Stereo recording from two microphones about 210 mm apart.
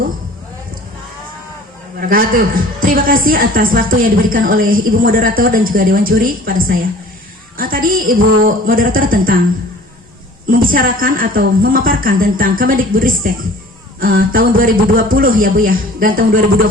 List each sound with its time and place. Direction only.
2.0 s a woman's voice: 40° right (ahead or behind)
10.4 s a woman's voice: 45° right (ahead or behind)